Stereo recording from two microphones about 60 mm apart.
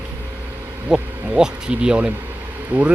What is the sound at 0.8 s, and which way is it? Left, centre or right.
Speech, centre.